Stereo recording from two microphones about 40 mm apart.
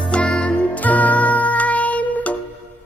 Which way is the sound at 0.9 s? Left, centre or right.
Left.